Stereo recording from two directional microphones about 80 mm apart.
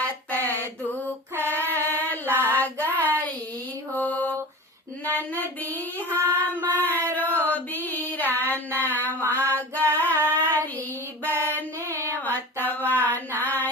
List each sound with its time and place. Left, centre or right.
0.3 s a sound: left
1.5 s female singing: left
2.4 s child singing: left
3.9 s mantra: left
5.0 s child singing: left
6.7 s a sound: left
7.2 s music: left
10.1 s female singing: left
11.9 s female singing: left